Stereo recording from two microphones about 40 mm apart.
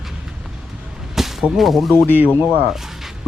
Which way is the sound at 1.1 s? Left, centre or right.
Centre.